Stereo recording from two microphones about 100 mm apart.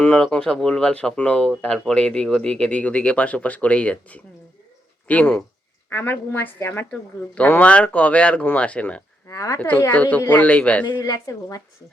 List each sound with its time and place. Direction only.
0.2 s a woman's voice: 10° left (ahead or behind)
9.2 s a woman's voice: 35° left (ahead or behind)
9.6 s speech: 15° left (ahead or behind)
10.8 s a woman's voice: 40° left (ahead or behind)